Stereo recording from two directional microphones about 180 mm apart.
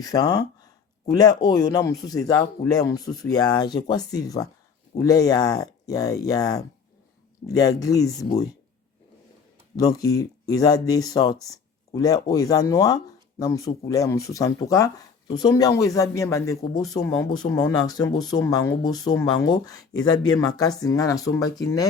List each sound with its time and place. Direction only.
0.0 s speech: 20° left (ahead or behind)
9.7 s speech: 20° left (ahead or behind)